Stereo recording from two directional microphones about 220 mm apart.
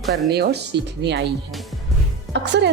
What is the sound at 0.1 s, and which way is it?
Speech, 50° right (ahead or behind).